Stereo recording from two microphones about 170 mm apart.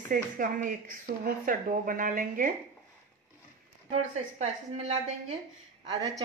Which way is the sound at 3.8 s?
40° right (ahead or behind).